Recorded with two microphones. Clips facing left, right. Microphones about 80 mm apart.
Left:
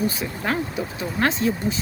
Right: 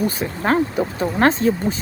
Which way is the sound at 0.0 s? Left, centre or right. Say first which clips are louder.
Right 4 dB; right.